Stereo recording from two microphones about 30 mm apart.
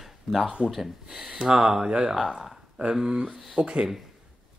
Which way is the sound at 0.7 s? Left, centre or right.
Centre.